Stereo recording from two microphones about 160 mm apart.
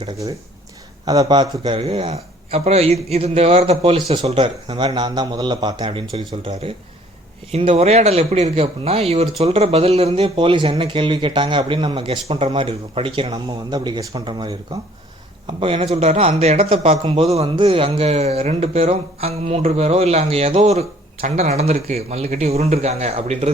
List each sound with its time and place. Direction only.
1.0 s a man's voice: 25° right (ahead or behind)
1.8 s a man's voice: 40° right (ahead or behind)
15.6 s a man's voice: 35° right (ahead or behind)